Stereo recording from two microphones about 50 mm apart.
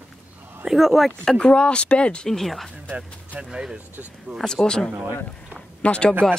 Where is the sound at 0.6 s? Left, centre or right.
Centre.